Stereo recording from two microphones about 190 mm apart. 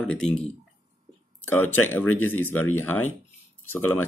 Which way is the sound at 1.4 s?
10° left (ahead or behind).